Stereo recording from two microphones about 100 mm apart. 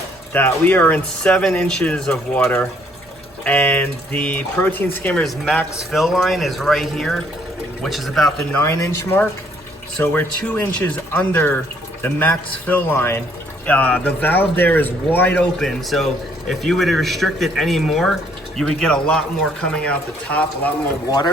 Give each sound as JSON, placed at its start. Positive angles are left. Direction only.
{"t": 0.3, "sound": "speech", "side_deg": 20}
{"t": 3.4, "sound": "speech", "side_deg": 15}
{"t": 5.9, "sound": "speech", "side_deg": 0}
{"t": 8.5, "sound": "a man's voice", "side_deg": 20}
{"t": 15.5, "sound": "speech", "side_deg": 5}